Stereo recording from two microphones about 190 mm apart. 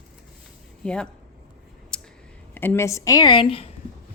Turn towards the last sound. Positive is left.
turn(degrees=25)  # may be behind; listen again after turning